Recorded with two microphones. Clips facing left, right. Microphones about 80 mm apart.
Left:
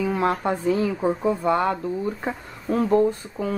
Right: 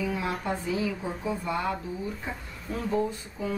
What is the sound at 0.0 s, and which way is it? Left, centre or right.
Speech, left.